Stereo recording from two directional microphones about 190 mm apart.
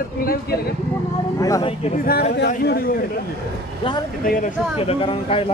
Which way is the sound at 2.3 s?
60° left (ahead or behind).